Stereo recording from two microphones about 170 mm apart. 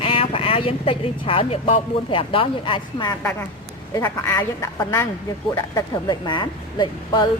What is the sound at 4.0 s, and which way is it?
A woman's voice, 15° left (ahead or behind).